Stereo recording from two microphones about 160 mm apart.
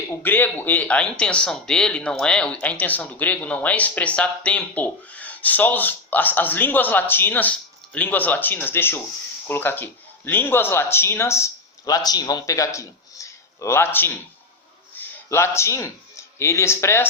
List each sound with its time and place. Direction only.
0.2 s speech: 10° left (ahead or behind)